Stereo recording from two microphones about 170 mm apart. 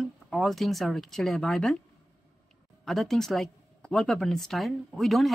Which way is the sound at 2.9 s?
Centre (ahead or behind).